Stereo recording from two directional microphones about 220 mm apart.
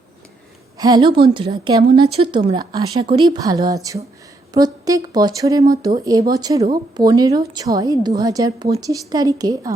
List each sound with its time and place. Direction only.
0.8 s a woman's voice: 20° right (ahead or behind)